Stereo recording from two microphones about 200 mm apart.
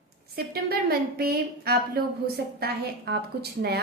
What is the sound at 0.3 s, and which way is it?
A woman's voice, 50° right (ahead or behind).